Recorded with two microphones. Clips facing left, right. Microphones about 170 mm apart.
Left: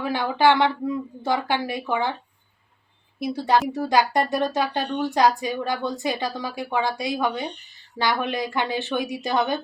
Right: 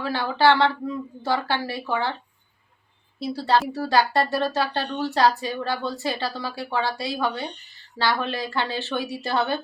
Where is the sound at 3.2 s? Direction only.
15° left (ahead or behind).